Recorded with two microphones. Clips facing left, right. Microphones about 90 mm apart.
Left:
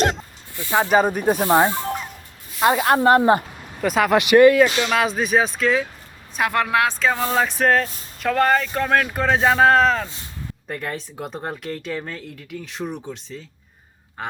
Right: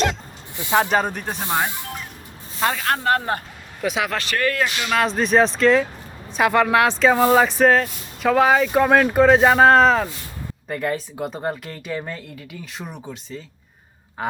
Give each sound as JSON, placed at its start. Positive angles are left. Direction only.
{"t": 0.5, "sound": "speech", "side_deg": -20}
{"t": 0.9, "sound": "speech", "side_deg": 5}
{"t": 1.5, "sound": "speech", "side_deg": 20}
{"t": 3.8, "sound": "speech", "side_deg": 0}
{"t": 4.1, "sound": "speech", "side_deg": 15}
{"t": 4.9, "sound": "speech", "side_deg": 5}
{"t": 7.2, "sound": "male singing", "side_deg": -15}
{"t": 7.4, "sound": "speech", "side_deg": 0}